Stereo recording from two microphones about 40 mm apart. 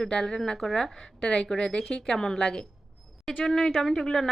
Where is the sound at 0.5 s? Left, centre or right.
Centre.